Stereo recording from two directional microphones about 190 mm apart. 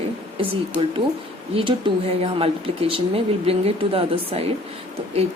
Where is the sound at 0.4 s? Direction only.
30° right (ahead or behind).